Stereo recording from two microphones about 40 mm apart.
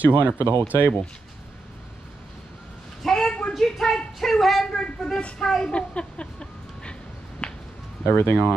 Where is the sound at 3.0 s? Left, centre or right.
Centre.